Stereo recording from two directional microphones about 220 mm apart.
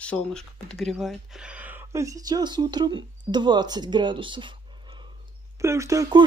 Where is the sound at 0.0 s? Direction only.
5° left (ahead or behind); by 4.6 s 20° right (ahead or behind).